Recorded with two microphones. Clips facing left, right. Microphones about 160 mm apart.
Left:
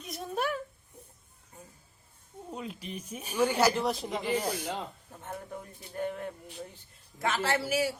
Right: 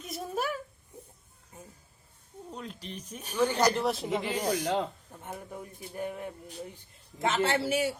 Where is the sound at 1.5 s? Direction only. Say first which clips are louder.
Right 2 dB; 20° right (ahead or behind).